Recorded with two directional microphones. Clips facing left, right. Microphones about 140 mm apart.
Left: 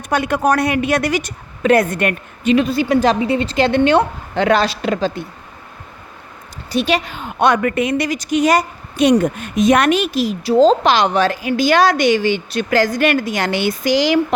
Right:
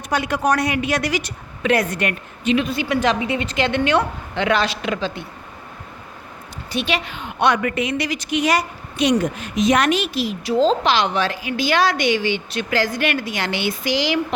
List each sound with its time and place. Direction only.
0.1 s a woman's voice: 50° left (ahead or behind)
6.7 s a woman's voice: 40° left (ahead or behind)